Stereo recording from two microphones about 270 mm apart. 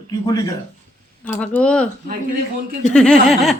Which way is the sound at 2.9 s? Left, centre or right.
Centre.